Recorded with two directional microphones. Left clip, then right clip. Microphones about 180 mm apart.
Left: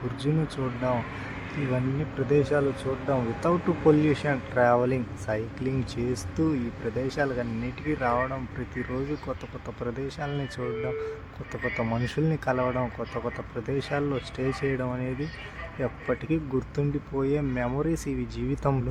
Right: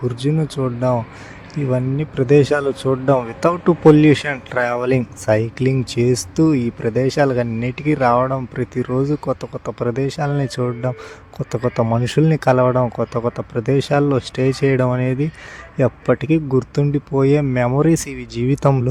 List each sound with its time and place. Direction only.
0.2 s speech: 45° right (ahead or behind)